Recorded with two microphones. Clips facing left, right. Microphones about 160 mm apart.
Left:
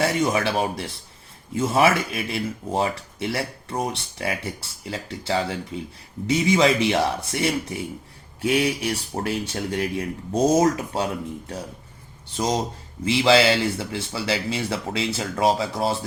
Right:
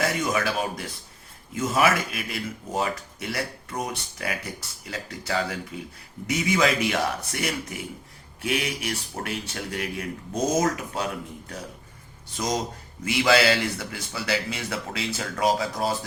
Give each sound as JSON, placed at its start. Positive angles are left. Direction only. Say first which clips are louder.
{"t": 0.0, "sound": "speech", "louder": "left 4 dB", "side_deg": 30}